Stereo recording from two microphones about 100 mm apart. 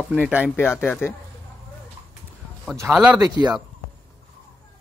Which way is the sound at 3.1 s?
40° right (ahead or behind).